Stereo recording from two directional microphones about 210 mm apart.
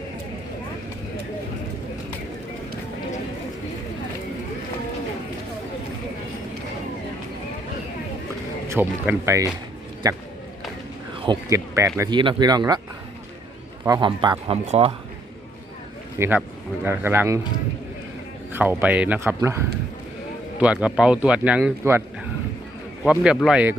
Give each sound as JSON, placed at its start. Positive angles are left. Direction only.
{"t": 8.7, "sound": "speech", "side_deg": -10}
{"t": 11.2, "sound": "speech", "side_deg": -20}
{"t": 13.8, "sound": "speech", "side_deg": -20}
{"t": 16.1, "sound": "speech", "side_deg": -10}
{"t": 18.5, "sound": "speech", "side_deg": -10}
{"t": 23.0, "sound": "speech", "side_deg": -5}